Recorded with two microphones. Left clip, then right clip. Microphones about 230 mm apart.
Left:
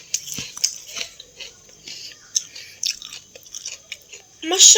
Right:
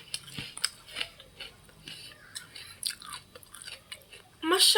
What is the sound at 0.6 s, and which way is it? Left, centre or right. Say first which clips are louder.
Chewing: left 10 dB; left.